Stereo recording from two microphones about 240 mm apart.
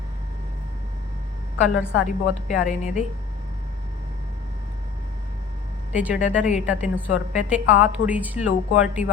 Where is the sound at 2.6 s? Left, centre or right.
Left.